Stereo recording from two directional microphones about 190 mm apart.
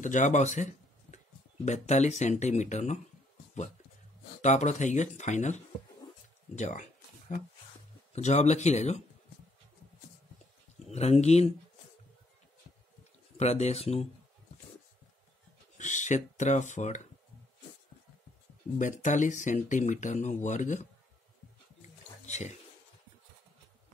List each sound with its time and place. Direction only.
0.0 s speech: 40° left (ahead or behind)
4.4 s speech: 40° left (ahead or behind)
6.5 s a sound: 40° left (ahead or behind)
8.1 s speech: 35° left (ahead or behind)
10.9 s speech: 35° left (ahead or behind)
13.4 s speech: 35° left (ahead or behind)
15.8 s speech: 40° left (ahead or behind)
18.8 s speech: 40° left (ahead or behind)
22.2 s speech: 35° left (ahead or behind)